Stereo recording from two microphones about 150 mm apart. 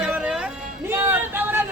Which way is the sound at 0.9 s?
20° right (ahead or behind).